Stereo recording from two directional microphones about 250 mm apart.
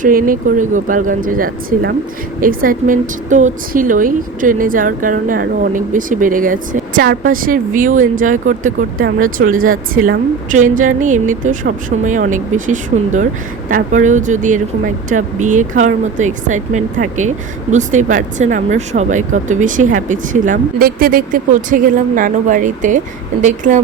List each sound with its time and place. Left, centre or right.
0.0 s a woman's voice: right